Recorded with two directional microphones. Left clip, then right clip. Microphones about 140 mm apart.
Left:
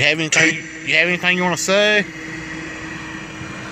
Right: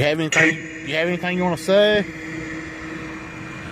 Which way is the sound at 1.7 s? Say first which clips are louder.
Even; 30° right (ahead or behind).